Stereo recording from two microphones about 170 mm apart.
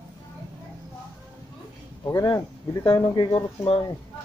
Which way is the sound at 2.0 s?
20° left (ahead or behind).